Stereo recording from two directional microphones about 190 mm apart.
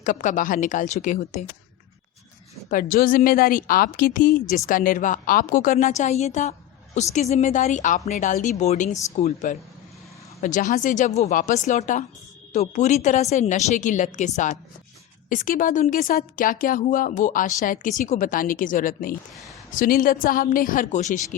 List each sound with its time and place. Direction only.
0.0 s a woman's voice: 40° left (ahead or behind)
2.6 s a woman's voice: 45° left (ahead or behind)